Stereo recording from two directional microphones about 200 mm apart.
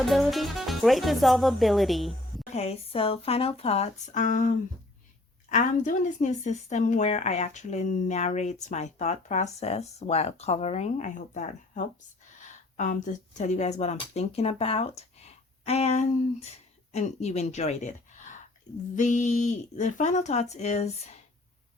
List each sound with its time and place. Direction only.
0.1 s speech: centre (ahead or behind)
2.5 s speech: 30° left (ahead or behind)